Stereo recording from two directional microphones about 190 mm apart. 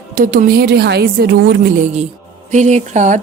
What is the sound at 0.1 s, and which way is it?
A woman's voice, 45° right (ahead or behind).